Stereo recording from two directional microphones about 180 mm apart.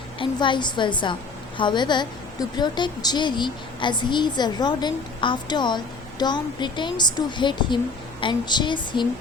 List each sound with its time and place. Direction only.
0.2 s a woman's voice: 25° left (ahead or behind)